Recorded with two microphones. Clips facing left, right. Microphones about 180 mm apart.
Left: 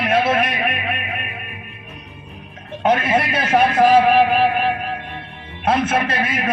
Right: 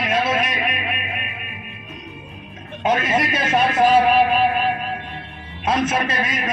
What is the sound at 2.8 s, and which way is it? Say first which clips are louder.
A man's voice: left 2 dB; 60° left (ahead or behind).